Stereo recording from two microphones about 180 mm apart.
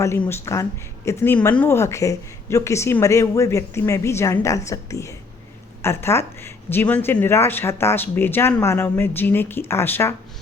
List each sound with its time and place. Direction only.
0.0 s speech: 15° left (ahead or behind)